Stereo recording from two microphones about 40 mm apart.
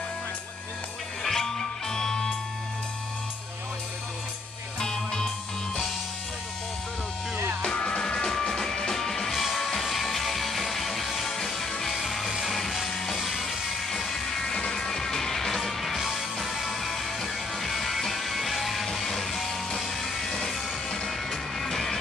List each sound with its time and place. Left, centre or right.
1.2 s music: centre
4.7 s music: centre
7.6 s music: left